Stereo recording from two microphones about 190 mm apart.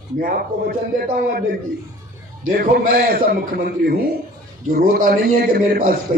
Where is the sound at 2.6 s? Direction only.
50° right (ahead or behind).